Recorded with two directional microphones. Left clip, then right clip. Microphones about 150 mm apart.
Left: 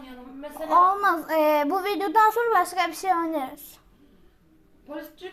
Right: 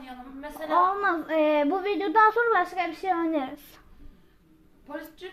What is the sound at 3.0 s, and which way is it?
Speech, 35° right (ahead or behind).